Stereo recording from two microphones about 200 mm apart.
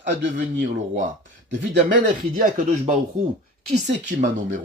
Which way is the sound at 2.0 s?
40° right (ahead or behind).